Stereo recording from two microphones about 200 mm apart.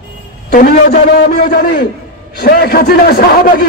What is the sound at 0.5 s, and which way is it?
A man's voice, 45° left (ahead or behind).